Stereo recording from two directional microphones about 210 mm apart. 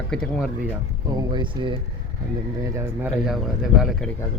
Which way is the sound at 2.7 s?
5° right (ahead or behind).